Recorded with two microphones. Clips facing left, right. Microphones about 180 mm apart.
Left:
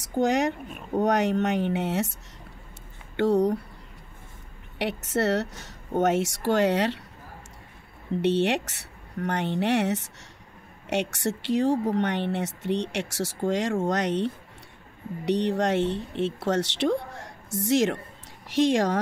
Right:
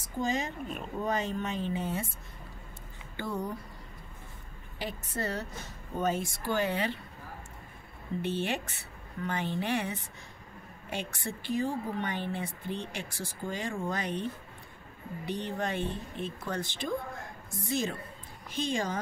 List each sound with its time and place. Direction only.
0.0 s a woman's voice: 80° left
3.2 s a woman's voice: 75° left (ahead or behind)
4.7 s a woman's voice: 80° left
8.2 s a woman's voice: 80° left